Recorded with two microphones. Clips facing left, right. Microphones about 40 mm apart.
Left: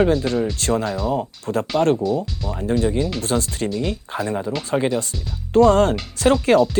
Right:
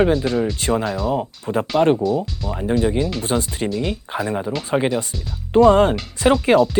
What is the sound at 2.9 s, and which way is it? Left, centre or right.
Speech, centre.